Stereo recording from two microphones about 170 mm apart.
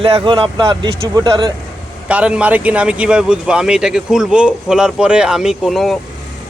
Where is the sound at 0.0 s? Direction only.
35° right (ahead or behind).